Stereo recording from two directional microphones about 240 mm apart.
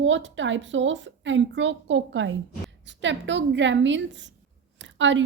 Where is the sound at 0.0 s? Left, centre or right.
Right.